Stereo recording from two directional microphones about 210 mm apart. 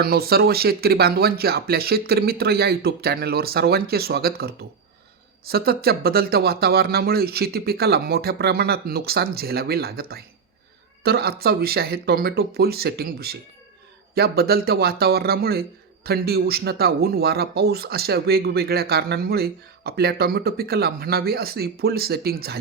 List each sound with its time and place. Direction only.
0.0 s speech: 50° right (ahead or behind)